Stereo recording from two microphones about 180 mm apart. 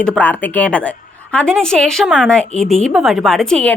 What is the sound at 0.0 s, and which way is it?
Speech, 5° left (ahead or behind).